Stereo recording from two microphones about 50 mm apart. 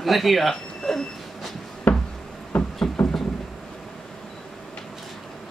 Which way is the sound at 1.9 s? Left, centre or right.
Left.